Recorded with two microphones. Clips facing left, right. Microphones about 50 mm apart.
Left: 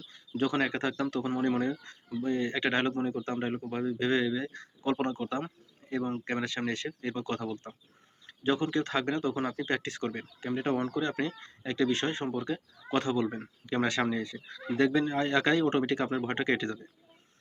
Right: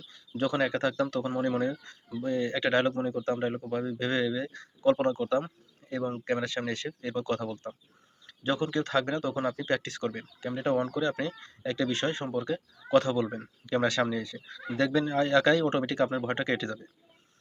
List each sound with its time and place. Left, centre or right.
0.3 s speech: left
5.8 s a sound: left
6.2 s speech: left